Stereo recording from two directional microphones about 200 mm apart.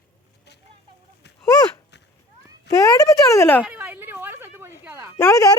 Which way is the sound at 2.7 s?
15° left (ahead or behind).